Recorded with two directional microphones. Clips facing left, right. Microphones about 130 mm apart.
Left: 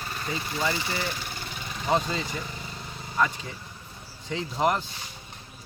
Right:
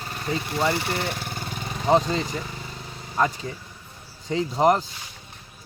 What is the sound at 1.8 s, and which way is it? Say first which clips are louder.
Speech: right 6 dB; 30° right (ahead or behind).